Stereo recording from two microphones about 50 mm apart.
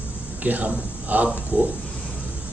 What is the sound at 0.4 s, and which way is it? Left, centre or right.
A man's voice, right.